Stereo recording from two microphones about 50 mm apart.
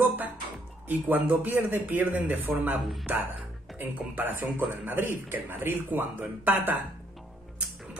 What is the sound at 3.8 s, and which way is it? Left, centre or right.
Speech, right.